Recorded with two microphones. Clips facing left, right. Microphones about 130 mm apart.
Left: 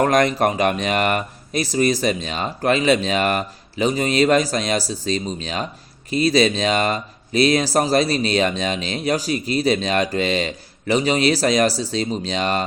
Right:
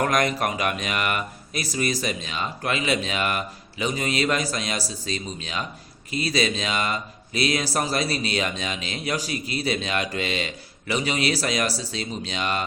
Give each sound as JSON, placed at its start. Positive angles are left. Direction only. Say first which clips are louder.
{"t": 0.0, "sound": "speech", "louder": "left 6 dB", "side_deg": 30}